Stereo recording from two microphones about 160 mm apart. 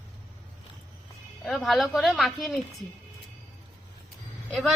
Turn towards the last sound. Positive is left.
turn(degrees=0)  # may be behind; listen again after turning